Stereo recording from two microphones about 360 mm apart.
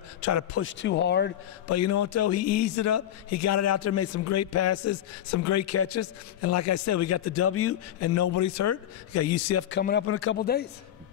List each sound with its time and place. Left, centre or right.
0.2 s a man's voice: left
0.6 s a man's voice: left
1.7 s a man's voice: left
9.8 s a man's voice: left